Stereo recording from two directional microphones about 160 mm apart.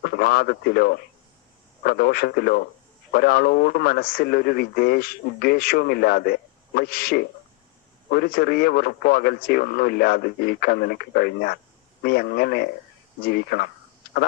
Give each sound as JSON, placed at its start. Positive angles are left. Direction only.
{"t": 0.0, "sound": "speech", "side_deg": 70}